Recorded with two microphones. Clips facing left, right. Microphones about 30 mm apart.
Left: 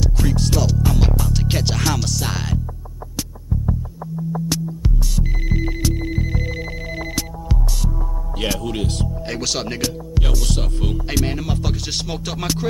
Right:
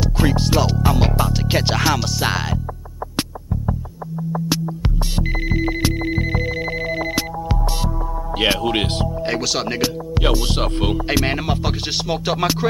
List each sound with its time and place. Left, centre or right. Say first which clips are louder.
0.0 s music: right 3 dB; right
1.3 s music: right 3 dB; centre
4.2 s music: right 2 dB; right
4.6 s music: right 2 dB; right
5.5 s music: right 2 dB; right
9.0 s music: right 5 dB; right
9.4 s music: right 3 dB; centre
10.2 s music: right 8 dB; right